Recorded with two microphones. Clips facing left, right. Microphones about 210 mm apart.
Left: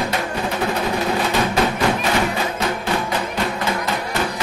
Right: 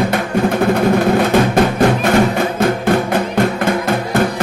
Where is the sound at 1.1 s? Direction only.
50° right (ahead or behind).